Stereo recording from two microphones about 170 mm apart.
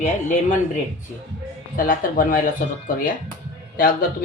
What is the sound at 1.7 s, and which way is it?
Speech, 55° left (ahead or behind).